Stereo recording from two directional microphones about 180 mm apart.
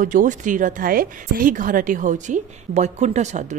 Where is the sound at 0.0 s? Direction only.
45° right (ahead or behind).